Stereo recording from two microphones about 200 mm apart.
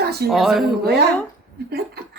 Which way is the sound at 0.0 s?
55° right (ahead or behind).